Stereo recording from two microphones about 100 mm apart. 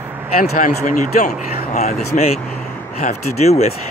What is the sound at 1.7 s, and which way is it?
Speech, 90° left.